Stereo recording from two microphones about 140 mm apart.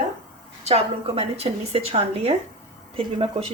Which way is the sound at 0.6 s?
45° right (ahead or behind).